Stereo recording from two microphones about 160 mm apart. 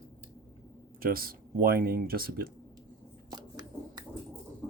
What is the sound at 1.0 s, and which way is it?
Speech, 65° right (ahead or behind).